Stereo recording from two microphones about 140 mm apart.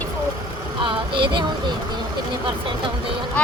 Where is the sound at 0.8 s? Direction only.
35° right (ahead or behind).